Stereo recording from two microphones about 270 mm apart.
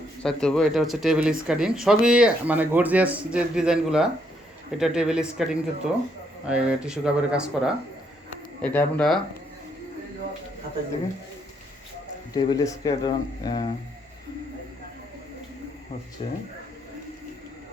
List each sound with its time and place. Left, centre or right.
0.2 s speech: centre
12.3 s speech: centre
16.2 s speech: centre